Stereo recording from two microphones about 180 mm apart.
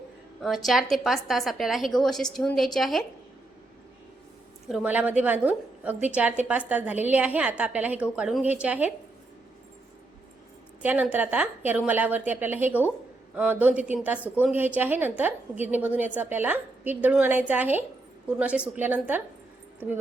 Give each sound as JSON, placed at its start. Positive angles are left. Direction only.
{"t": 0.4, "sound": "a woman's voice", "side_deg": 0}
{"t": 4.7, "sound": "a woman's voice", "side_deg": -5}
{"t": 10.8, "sound": "a woman's voice", "side_deg": -10}